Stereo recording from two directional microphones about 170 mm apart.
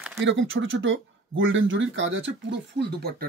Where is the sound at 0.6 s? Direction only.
90° right; by 3.3 s 70° right (ahead or behind).